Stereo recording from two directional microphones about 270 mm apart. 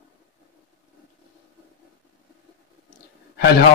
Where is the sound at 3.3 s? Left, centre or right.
Left.